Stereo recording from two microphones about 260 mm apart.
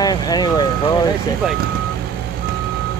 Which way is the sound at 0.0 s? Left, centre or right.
Centre.